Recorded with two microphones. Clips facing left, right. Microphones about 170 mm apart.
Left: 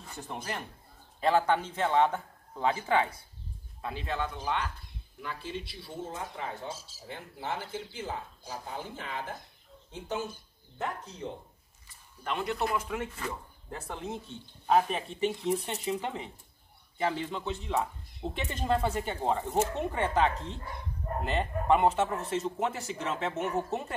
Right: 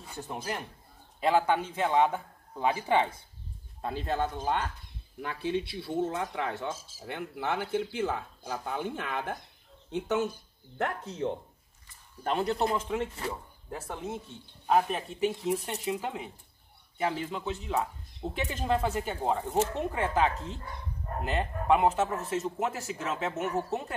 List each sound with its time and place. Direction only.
0.0 s a man's voice: 5° right (ahead or behind)
3.8 s a man's voice: 40° right (ahead or behind)
5.2 s speech: 60° right (ahead or behind)
6.7 s speech: 55° right (ahead or behind)
12.2 s speech: 35° right (ahead or behind); by 13.3 s 20° right (ahead or behind)
13.7 s speech: 5° right (ahead or behind)